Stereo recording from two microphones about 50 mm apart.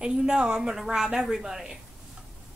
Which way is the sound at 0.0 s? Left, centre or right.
Centre.